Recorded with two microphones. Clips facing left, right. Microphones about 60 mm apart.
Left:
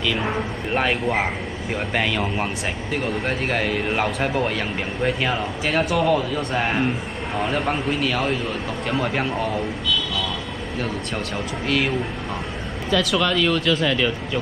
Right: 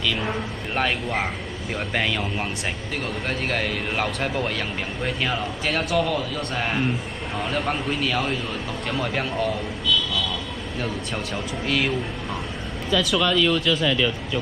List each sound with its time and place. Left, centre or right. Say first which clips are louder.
0.0 s a man's voice: left 2 dB; centre
11.6 s speech: left 2 dB; centre
12.9 s speech: left 1 dB; left